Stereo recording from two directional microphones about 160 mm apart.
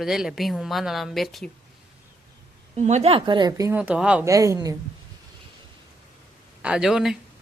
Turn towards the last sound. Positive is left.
turn(degrees=-5)  # may be behind; listen again after turning